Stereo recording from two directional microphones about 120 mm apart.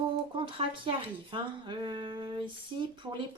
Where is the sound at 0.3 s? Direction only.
45° right (ahead or behind).